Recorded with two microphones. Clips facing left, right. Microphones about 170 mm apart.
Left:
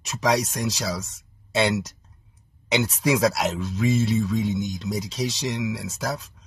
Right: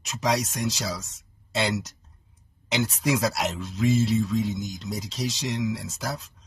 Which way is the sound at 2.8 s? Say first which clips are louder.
Left 2 dB; 60° left (ahead or behind).